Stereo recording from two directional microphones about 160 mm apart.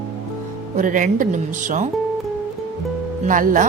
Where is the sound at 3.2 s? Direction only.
55° right (ahead or behind).